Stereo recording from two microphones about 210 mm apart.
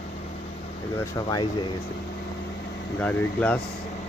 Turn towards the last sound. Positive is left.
turn(degrees=5)  # may be behind; listen again after turning